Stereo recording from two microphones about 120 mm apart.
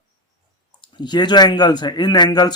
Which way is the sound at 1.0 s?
40° left (ahead or behind).